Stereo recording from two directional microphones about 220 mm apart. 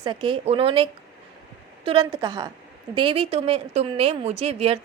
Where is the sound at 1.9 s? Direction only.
20° right (ahead or behind).